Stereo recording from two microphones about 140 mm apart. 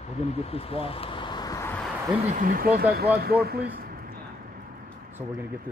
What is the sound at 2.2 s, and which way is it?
Speech, 80° right.